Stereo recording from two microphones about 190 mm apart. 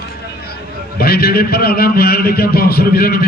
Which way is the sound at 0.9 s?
55° left (ahead or behind).